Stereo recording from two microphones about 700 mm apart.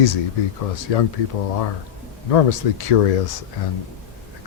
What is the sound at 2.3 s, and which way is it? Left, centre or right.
Speech, left.